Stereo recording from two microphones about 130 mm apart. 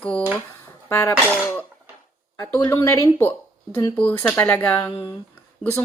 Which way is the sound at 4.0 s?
10° left (ahead or behind).